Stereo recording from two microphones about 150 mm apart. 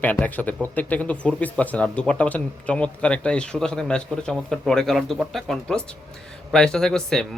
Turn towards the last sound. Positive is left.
turn(degrees=5)  # may be behind; listen again after turning